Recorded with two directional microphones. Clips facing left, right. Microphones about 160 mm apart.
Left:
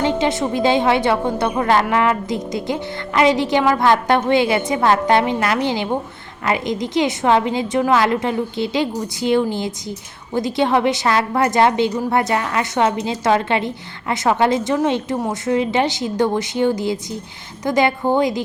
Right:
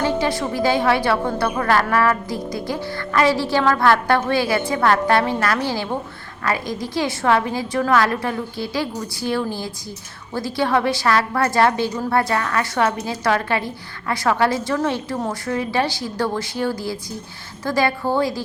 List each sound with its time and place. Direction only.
0.0 s a woman's voice: 20° left (ahead or behind)